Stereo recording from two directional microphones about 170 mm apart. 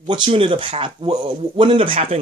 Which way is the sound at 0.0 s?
30° right (ahead or behind).